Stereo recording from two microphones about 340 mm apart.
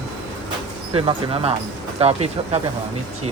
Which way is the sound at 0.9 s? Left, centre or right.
Centre.